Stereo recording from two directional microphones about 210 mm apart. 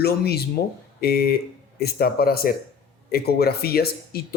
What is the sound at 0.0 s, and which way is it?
Speech, 50° left (ahead or behind).